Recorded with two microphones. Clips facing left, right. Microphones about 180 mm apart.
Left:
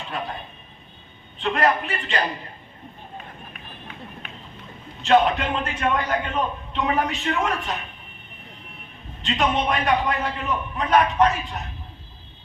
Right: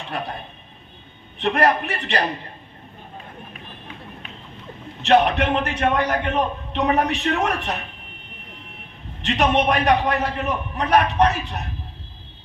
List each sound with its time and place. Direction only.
1.4 s a man's voice: 70° right (ahead or behind)
5.0 s a man's voice: 70° right (ahead or behind)
9.2 s a man's voice: 70° right (ahead or behind)